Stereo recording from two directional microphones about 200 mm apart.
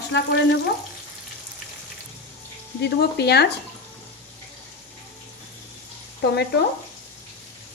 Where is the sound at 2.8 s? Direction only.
55° left (ahead or behind).